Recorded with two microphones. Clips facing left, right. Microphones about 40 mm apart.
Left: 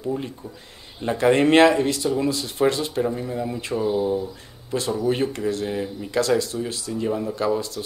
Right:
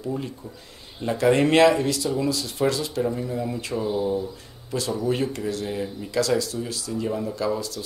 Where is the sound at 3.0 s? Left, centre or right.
Centre.